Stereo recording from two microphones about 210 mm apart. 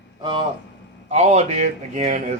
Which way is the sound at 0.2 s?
25° right (ahead or behind).